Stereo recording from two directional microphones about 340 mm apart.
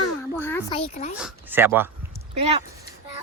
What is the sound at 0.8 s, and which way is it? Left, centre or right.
Speech, left.